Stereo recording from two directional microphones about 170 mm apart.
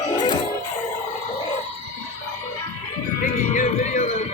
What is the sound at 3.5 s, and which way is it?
Music, 45° left (ahead or behind).